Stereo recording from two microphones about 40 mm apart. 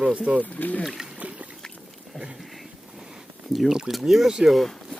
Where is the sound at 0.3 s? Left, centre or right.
Right.